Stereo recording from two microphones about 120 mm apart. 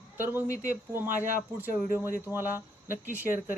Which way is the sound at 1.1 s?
90° right.